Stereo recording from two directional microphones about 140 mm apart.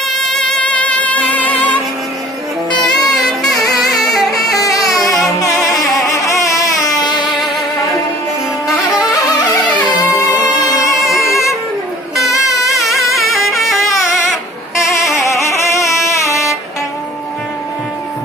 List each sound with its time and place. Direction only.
0.1 s music: 5° left (ahead or behind)
2.8 s saxophone: centre (ahead or behind)
3.5 s music: centre (ahead or behind)
4.6 s a sound: 25° left (ahead or behind)
5.0 s music: centre (ahead or behind)
6.0 s a sound: 20° left (ahead or behind)
7.0 s music: 30° left (ahead or behind)
10.7 s music: 25° left (ahead or behind)
11.0 s music: centre (ahead or behind)
12.6 s a sound: centre (ahead or behind)
13.8 s a sound: 20° left (ahead or behind)
15.1 s music: 20° left (ahead or behind)